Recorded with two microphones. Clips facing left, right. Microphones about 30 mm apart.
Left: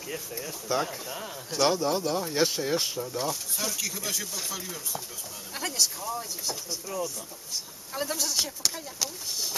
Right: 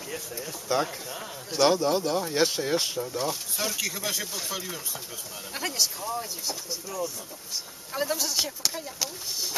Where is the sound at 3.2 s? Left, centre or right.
Centre.